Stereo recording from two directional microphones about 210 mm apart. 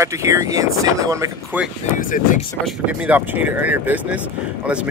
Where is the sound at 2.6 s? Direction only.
5° right (ahead or behind).